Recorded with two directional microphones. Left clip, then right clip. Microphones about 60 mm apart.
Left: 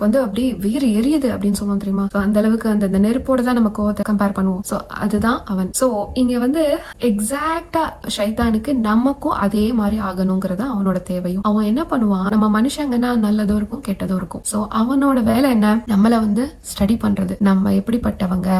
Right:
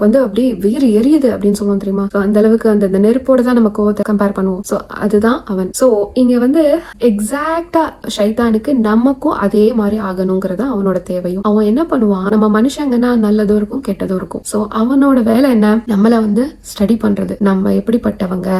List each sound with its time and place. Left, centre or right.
0.0 s speech: left
8.4 s speech: left
14.8 s speech: left